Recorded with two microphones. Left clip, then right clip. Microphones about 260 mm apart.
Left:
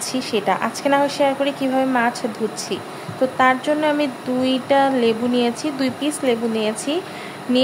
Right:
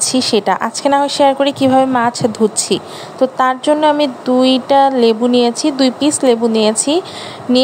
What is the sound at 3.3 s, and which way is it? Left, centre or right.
Speech, right.